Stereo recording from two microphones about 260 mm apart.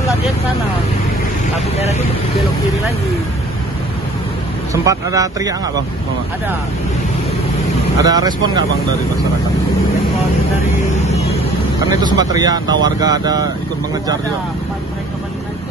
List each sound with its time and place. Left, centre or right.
4.8 s speech: centre
8.0 s speech: centre
11.1 s vehicle: left
11.9 s speech: centre